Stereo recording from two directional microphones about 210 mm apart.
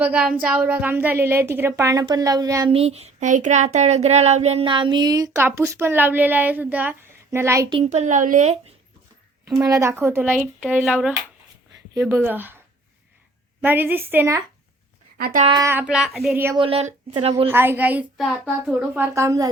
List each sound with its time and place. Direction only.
0.0 s a woman's voice: 5° right (ahead or behind)
2.7 s child singing: 30° right (ahead or behind); by 7.7 s 15° right (ahead or behind)
7.7 s speech: 30° right (ahead or behind)
9.5 s a woman's voice: 15° right (ahead or behind)
11.9 s a woman's voice: 10° right (ahead or behind)
13.6 s a woman's voice: 10° right (ahead or behind)
15.2 s speech: 40° right (ahead or behind)
15.4 s a woman's voice: 15° right (ahead or behind)
16.6 s child singing: 25° right (ahead or behind)
17.5 s a woman's voice: 10° right (ahead or behind)